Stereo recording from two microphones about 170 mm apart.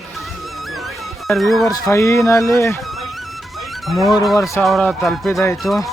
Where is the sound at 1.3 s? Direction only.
Centre (ahead or behind).